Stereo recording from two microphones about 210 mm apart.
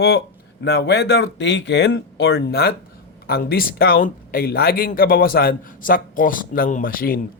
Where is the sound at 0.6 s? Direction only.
55° left (ahead or behind).